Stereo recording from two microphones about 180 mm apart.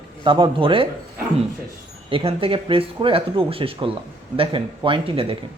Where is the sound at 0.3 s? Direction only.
25° right (ahead or behind).